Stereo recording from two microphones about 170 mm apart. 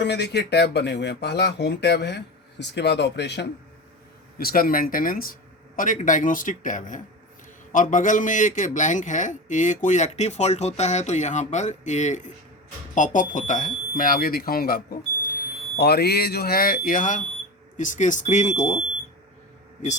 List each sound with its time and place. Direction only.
0.0 s speech: 80° left
4.4 s a man's voice: 60° left (ahead or behind)
15.8 s a man's voice: 70° left (ahead or behind); by 18.8 s 45° left (ahead or behind)